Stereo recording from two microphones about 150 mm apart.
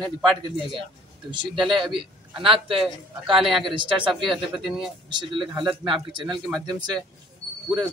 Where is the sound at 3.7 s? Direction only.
35° right (ahead or behind).